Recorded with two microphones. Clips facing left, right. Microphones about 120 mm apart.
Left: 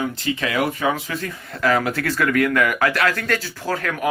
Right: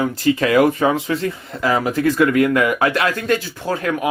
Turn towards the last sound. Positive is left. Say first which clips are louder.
# right 3 dB
turn(degrees=-20)  # may be behind; listen again after turning